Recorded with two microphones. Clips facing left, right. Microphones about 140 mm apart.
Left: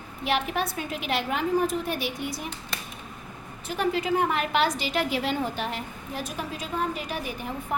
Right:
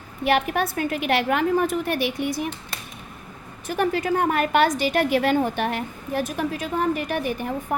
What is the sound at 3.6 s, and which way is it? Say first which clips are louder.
A woman's voice: right 3 dB; 50° right (ahead or behind).